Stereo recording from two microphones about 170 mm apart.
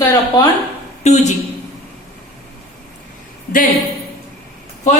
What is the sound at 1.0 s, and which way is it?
Speech, 40° left (ahead or behind).